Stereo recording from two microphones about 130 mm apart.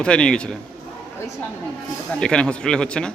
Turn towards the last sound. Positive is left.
turn(degrees=5)  # may be behind; listen again after turning